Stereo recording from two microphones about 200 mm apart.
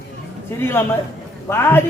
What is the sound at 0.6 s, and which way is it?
A man's voice, 10° left (ahead or behind).